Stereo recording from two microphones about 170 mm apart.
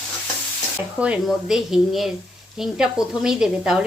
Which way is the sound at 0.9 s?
5° right (ahead or behind).